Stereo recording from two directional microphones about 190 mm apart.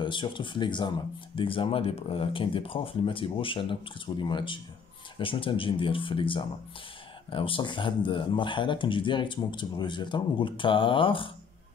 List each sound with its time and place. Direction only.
0.0 s speech: 25° left (ahead or behind)